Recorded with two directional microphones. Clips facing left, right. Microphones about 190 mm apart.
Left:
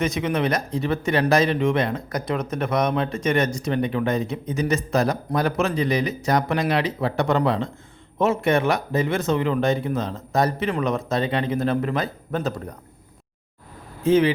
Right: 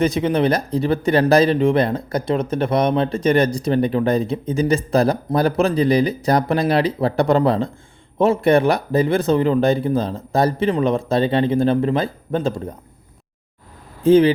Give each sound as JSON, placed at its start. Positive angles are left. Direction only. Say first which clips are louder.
{"t": 0.0, "sound": "speech", "louder": "right 5 dB", "side_deg": -30}
{"t": 14.0, "sound": "speech", "louder": "right 5 dB", "side_deg": -35}